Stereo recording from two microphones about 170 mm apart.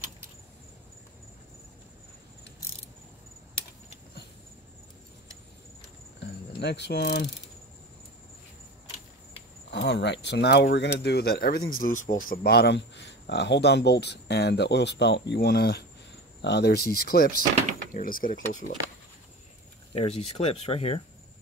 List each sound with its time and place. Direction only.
6.6 s mechanisms: 80° left
9.7 s speech: 90° left; by 15.8 s 65° left (ahead or behind)
16.3 s speech: 80° left
17.0 s speech: 60° left (ahead or behind)
19.9 s speech: 35° left (ahead or behind)